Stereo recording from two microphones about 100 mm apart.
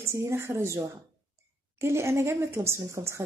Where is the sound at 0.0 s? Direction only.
30° right (ahead or behind).